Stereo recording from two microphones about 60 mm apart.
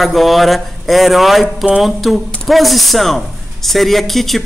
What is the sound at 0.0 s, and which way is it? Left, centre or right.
Speech, centre.